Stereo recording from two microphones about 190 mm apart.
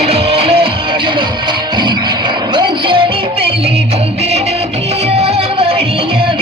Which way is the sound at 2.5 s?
25° right (ahead or behind).